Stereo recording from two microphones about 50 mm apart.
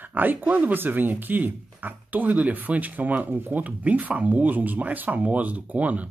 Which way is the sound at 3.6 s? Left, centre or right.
Right.